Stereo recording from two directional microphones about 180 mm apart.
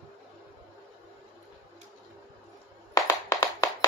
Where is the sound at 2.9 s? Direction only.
20° left (ahead or behind).